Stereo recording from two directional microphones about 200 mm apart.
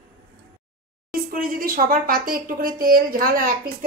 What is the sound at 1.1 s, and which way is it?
Speech, 45° right (ahead or behind).